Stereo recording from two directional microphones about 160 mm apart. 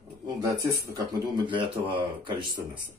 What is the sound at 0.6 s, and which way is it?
Speech, 20° right (ahead or behind).